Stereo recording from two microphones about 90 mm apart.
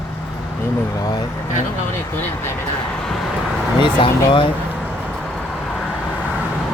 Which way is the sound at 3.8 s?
65° left (ahead or behind).